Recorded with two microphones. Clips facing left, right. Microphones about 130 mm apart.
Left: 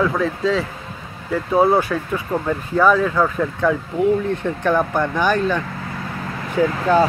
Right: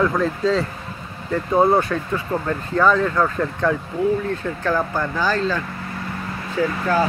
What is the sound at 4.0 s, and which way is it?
Speech, 20° left (ahead or behind).